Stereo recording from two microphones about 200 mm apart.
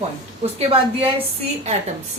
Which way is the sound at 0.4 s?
25° right (ahead or behind).